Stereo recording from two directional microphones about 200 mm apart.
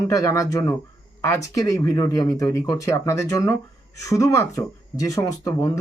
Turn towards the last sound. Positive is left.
turn(degrees=20)  # may be behind; listen again after turning